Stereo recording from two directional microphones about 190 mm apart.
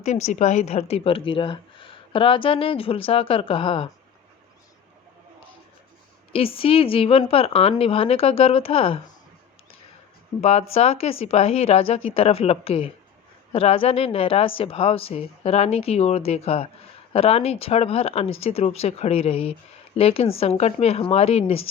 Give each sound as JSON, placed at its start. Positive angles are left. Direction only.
{"t": 0.0, "sound": "a woman's voice", "side_deg": 35}
{"t": 6.3, "sound": "a woman's voice", "side_deg": 30}
{"t": 10.4, "sound": "a woman's voice", "side_deg": 35}